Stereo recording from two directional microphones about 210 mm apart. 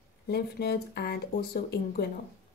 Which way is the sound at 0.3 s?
50° left (ahead or behind).